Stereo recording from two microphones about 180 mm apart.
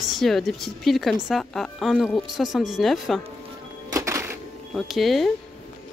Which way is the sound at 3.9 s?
20° right (ahead or behind).